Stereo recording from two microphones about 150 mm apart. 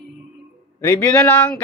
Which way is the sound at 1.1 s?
10° left (ahead or behind).